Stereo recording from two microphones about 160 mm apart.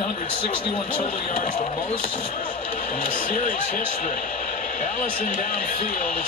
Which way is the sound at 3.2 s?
55° left (ahead or behind).